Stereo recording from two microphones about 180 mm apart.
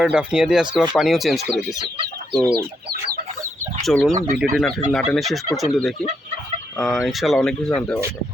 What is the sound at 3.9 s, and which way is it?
Speech, centre (ahead or behind).